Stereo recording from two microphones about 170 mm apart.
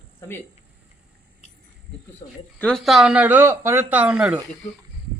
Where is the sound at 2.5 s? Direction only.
5° left (ahead or behind).